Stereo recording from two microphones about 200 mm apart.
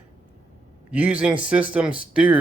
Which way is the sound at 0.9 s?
5° right (ahead or behind).